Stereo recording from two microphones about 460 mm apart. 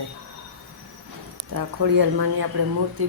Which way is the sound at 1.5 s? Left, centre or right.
Right.